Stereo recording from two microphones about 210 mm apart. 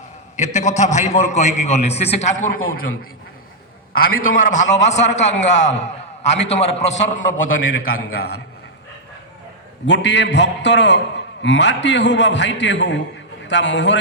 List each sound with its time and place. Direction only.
0.3 s a man's voice: 35° left (ahead or behind)
2.4 s a man's voice: 45° left (ahead or behind)
4.4 s a man's voice: 40° left (ahead or behind)
7.3 s a man's voice: 70° left (ahead or behind)
9.8 s a man's voice: 55° left (ahead or behind)